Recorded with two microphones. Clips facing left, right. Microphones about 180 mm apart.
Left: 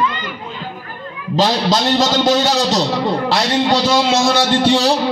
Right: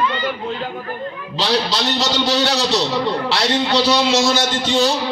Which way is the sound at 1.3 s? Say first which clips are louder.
Left 5 dB; 45° left (ahead or behind).